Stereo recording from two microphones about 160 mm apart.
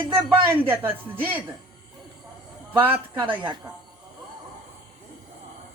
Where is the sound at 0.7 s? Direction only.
10° right (ahead or behind).